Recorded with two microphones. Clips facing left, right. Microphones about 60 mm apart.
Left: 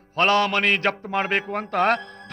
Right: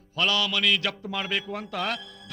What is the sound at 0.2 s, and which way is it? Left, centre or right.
A man's voice, left.